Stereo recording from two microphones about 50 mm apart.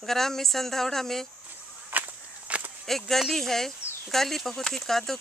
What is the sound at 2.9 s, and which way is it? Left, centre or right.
Speech, centre.